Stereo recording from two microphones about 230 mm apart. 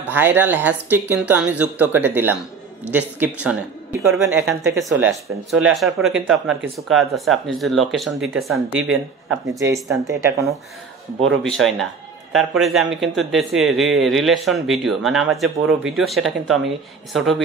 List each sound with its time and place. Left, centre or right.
0.0 s speech: centre
11.4 s speech: centre